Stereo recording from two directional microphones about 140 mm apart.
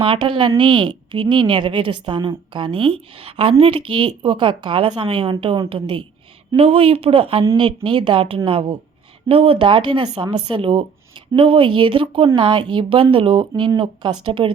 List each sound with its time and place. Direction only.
0.0 s a woman's voice: 35° right (ahead or behind)